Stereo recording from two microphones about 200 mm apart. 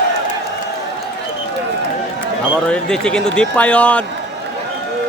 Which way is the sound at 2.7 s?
5° left (ahead or behind).